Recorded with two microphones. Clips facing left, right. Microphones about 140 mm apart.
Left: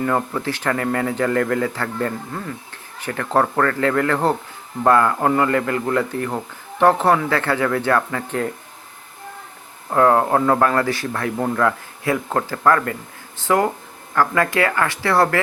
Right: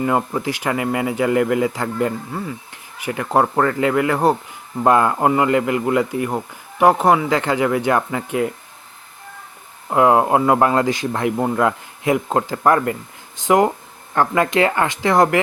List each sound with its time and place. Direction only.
0.0 s speech: 15° right (ahead or behind)
9.9 s speech: 15° right (ahead or behind)